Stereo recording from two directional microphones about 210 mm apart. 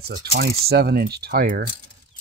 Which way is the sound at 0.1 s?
50° right (ahead or behind).